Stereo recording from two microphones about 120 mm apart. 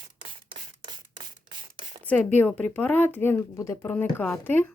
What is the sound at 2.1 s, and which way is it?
Speech, 15° left (ahead or behind).